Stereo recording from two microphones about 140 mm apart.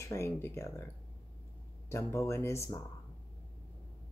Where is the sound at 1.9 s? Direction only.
20° left (ahead or behind).